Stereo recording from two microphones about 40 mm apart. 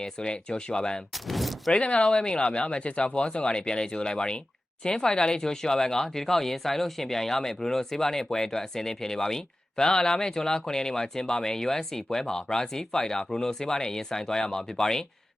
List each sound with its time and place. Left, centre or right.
0.0 s speech: left
1.3 s speech: centre
1.7 s speech: left